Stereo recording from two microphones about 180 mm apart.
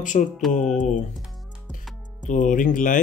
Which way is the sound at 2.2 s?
45° left (ahead or behind).